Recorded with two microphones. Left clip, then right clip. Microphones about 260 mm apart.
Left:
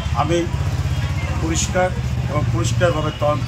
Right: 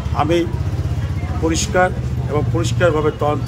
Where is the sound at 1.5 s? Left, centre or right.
Centre.